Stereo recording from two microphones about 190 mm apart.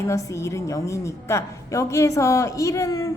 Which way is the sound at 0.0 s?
15° left (ahead or behind).